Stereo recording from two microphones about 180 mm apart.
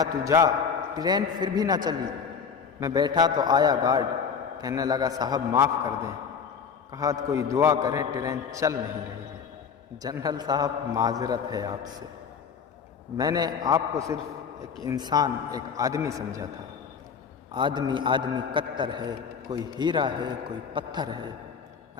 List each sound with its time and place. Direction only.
0.0 s a man's voice: 20° right (ahead or behind)
10.0 s a man's voice: 20° right (ahead or behind)
13.1 s a man's voice: 20° right (ahead or behind)
17.5 s a man's voice: 25° right (ahead or behind)